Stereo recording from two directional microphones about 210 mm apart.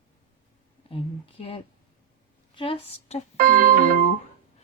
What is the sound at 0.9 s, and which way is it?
Speech, 25° left (ahead or behind).